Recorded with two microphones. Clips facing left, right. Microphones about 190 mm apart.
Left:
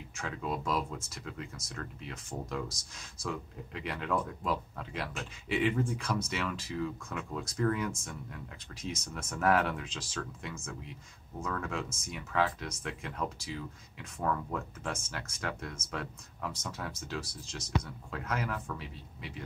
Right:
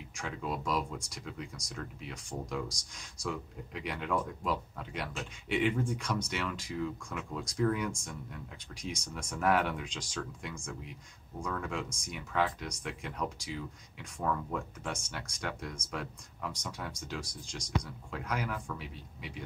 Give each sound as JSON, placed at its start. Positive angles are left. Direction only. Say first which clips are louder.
{"t": 0.2, "sound": "speech", "louder": "left 1 dB", "side_deg": 0}
{"t": 11.3, "sound": "speech", "louder": "even", "side_deg": -10}
{"t": 11.7, "sound": "speech", "louder": "even", "side_deg": 5}